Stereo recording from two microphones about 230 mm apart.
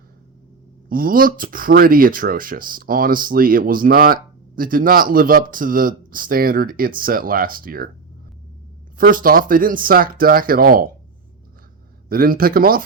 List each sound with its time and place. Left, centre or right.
0.9 s speech: right
9.0 s speech: right
12.0 s speech: right